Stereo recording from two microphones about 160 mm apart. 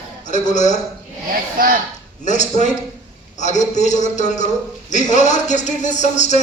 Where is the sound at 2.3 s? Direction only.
50° left (ahead or behind).